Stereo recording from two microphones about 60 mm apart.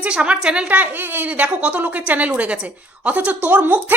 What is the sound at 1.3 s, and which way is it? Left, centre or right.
A woman's voice, right.